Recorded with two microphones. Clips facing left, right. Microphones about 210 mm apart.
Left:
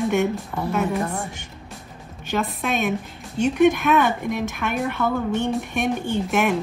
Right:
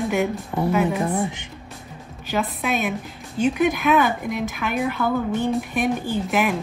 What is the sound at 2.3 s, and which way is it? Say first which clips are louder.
Speech: even; centre (ahead or behind).